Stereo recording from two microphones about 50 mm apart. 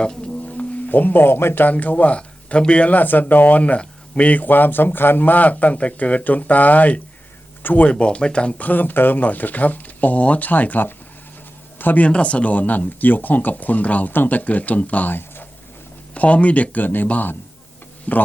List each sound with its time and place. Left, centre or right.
0.0 s speech: centre
0.4 s music: left
1.6 s speech: left
4.3 s speech: left
7.9 s a man's voice: left
12.0 s speech: left
16.1 s speech: left